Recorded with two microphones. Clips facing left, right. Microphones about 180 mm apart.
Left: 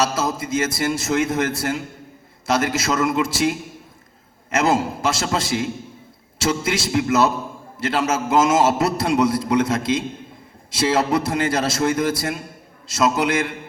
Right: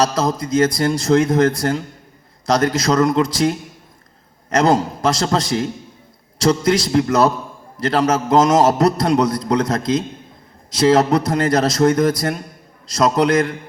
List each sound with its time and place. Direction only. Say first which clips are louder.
0.0 s a man's voice: right 4 dB; 5° left (ahead or behind)